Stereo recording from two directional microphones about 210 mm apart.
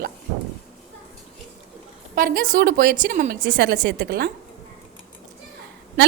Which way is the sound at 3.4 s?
60° right (ahead or behind).